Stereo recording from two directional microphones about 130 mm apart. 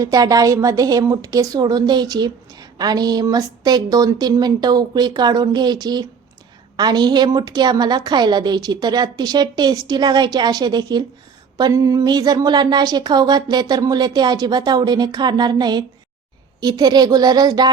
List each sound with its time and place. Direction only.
0.0 s a woman's voice: 25° right (ahead or behind)